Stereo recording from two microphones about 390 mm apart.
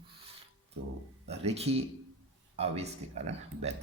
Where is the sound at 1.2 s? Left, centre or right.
Centre.